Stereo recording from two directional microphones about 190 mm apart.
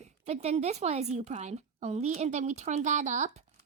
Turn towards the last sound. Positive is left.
turn(degrees=-40)  # may be behind; listen again after turning